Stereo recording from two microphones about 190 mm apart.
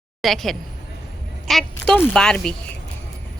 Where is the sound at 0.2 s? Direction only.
Centre (ahead or behind).